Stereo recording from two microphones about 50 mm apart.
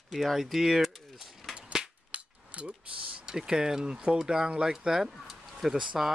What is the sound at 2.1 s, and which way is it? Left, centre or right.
Mechanisms, right.